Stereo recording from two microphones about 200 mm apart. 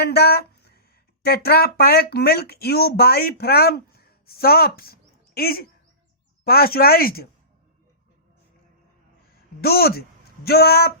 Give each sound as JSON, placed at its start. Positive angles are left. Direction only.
{"t": 0.0, "sound": "a sound", "side_deg": 55}
{"t": 1.2, "sound": "speech", "side_deg": 50}
{"t": 9.6, "sound": "speech", "side_deg": 50}